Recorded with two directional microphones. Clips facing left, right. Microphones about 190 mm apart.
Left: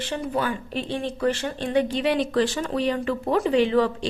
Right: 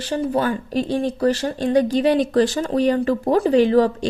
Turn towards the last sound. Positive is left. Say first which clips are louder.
# right 5 dB
turn(degrees=-40)  # may be behind; listen again after turning